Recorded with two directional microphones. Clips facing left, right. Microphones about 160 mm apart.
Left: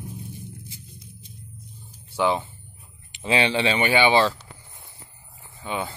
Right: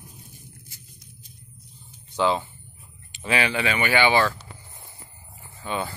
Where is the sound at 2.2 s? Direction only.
15° left (ahead or behind).